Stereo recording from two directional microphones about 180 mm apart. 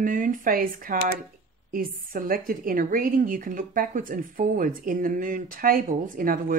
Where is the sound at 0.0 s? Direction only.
50° right (ahead or behind).